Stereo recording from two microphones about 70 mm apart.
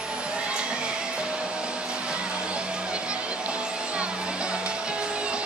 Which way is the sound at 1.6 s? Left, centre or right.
Centre.